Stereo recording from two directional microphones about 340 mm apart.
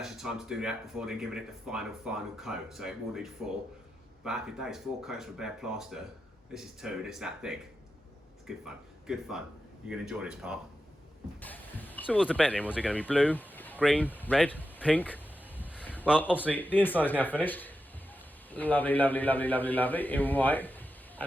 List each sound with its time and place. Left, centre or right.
0.0 s speech: centre